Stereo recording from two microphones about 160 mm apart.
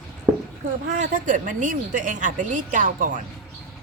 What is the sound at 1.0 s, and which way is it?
A woman's voice, 55° right (ahead or behind).